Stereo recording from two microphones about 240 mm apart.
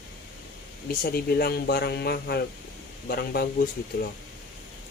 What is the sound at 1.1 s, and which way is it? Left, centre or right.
Speech, left.